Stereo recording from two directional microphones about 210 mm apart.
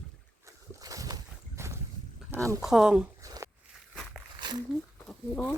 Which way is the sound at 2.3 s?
15° right (ahead or behind).